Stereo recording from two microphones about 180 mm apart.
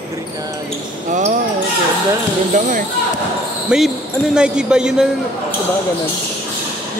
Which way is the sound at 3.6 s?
5° right (ahead or behind).